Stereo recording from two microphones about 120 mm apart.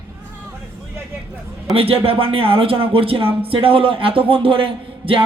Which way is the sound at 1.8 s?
50° right (ahead or behind).